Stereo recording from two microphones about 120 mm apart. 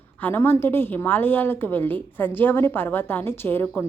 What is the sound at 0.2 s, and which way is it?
A woman's voice, 15° left (ahead or behind).